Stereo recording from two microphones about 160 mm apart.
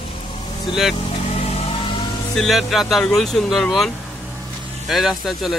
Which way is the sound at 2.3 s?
Centre (ahead or behind).